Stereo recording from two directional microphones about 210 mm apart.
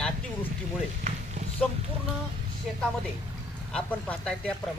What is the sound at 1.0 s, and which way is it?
Speech, 30° right (ahead or behind).